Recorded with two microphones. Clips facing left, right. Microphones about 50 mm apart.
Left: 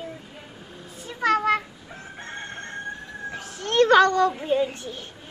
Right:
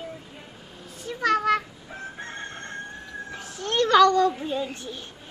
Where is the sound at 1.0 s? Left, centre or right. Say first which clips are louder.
Left 1 dB; centre.